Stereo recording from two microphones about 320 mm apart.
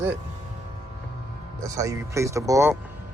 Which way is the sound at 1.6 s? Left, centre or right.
Centre.